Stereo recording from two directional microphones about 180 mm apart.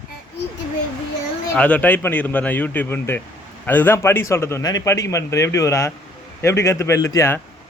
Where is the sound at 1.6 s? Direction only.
5° left (ahead or behind).